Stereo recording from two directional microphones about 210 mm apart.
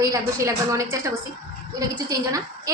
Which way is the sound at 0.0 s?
15° right (ahead or behind).